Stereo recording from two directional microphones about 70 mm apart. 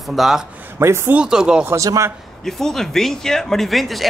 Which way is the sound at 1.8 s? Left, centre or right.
Right.